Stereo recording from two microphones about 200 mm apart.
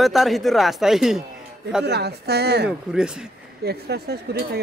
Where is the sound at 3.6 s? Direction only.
55° right (ahead or behind).